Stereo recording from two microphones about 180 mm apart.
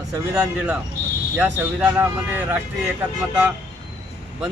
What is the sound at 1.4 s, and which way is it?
Speech, 10° right (ahead or behind).